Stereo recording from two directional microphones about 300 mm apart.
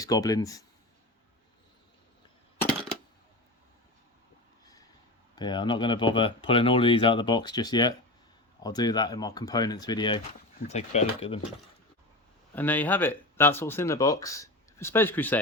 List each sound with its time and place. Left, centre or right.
0.0 s speech: centre
5.3 s speech: centre
12.5 s speech: centre